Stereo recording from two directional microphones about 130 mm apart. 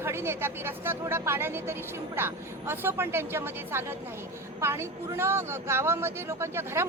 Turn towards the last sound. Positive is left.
turn(degrees=-20)  # may be behind; listen again after turning